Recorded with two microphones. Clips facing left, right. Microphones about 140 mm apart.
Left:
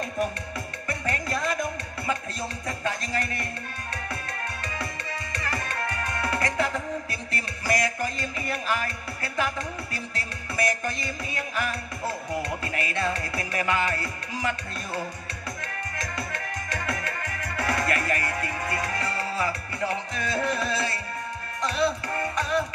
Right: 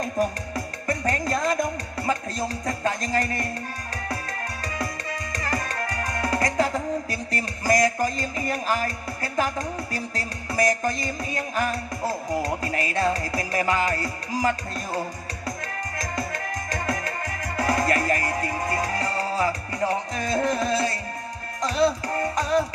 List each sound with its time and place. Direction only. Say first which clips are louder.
0.0 s music: right 4 dB; 40° right (ahead or behind)
16.0 s music: right 4 dB; 40° right (ahead or behind)